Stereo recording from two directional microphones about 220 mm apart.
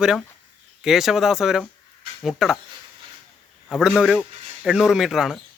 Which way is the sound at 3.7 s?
Centre (ahead or behind).